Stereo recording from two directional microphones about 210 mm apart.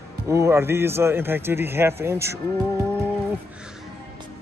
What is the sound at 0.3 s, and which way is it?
A man's voice, 15° right (ahead or behind).